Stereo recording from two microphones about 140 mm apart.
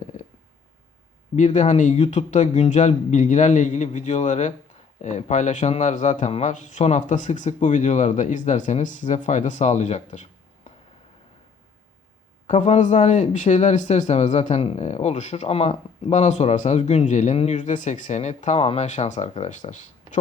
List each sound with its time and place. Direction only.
1.4 s a man's voice: 55° left (ahead or behind)
12.5 s a man's voice: 55° left (ahead or behind)